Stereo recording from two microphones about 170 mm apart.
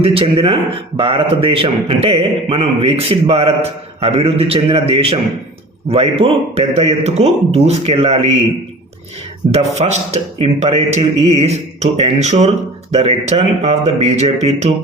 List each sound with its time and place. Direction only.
0.0 s a man's voice: 35° right (ahead or behind)
9.7 s a man's voice: 40° right (ahead or behind)